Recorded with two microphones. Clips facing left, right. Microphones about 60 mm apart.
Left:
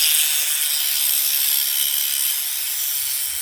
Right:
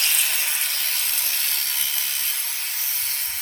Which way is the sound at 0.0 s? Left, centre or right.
Right.